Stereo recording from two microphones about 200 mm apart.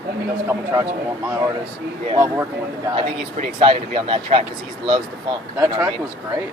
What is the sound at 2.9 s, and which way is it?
Speech, 35° right (ahead or behind).